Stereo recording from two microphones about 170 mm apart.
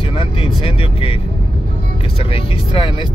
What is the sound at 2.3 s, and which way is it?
Speech, 30° left (ahead or behind).